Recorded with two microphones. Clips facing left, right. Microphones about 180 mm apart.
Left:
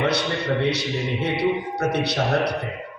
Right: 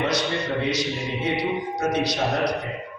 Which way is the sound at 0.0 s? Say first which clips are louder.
Left 1 dB; 65° left (ahead or behind).